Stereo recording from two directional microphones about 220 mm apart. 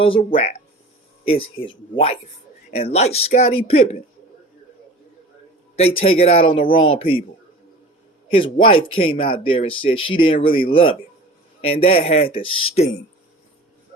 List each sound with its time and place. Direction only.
0.0 s speech: 25° left (ahead or behind)
5.7 s speech: 25° left (ahead or behind)
8.3 s speech: 25° left (ahead or behind)